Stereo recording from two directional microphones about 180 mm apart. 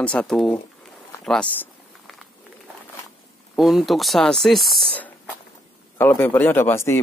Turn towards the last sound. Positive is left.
turn(degrees=15)  # may be behind; listen again after turning